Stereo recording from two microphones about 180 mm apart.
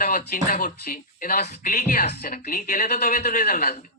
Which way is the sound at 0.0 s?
45° left (ahead or behind).